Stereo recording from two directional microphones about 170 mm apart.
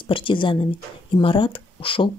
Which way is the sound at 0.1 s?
30° left (ahead or behind).